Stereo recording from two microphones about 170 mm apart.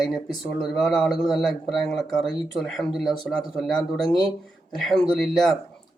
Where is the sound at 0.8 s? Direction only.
Centre (ahead or behind).